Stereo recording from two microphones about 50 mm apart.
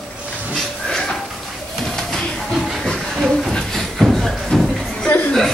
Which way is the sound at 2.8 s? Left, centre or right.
Centre.